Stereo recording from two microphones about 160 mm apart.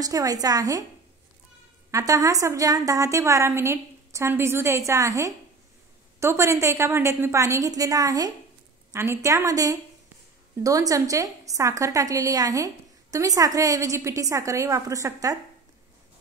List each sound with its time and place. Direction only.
0.0 s a woman's voice: 20° right (ahead or behind)
1.9 s a woman's voice: 20° right (ahead or behind)